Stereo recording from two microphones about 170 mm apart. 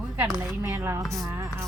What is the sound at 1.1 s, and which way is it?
Music, 20° right (ahead or behind).